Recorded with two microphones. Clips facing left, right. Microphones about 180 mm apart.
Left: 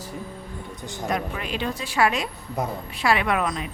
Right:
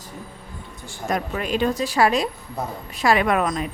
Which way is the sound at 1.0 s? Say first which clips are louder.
Right 3 dB; 45° right (ahead or behind).